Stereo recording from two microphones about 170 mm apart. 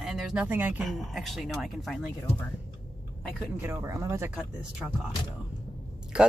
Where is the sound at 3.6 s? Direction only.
15° right (ahead or behind).